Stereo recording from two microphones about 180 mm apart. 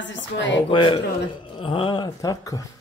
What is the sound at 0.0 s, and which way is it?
Speech, 85° left.